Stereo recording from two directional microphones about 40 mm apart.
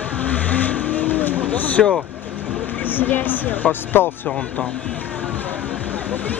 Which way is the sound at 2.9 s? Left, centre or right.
Left.